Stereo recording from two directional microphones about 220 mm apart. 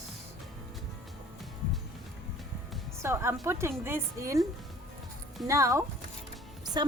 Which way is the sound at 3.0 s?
10° right (ahead or behind).